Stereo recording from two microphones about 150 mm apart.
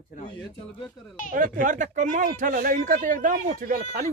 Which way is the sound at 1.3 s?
60° right (ahead or behind).